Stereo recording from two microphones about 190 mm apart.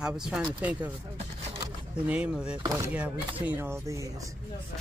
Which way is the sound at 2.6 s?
20° right (ahead or behind).